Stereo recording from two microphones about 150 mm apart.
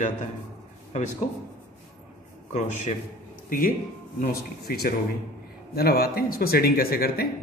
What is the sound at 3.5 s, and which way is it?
Speech, 70° left (ahead or behind).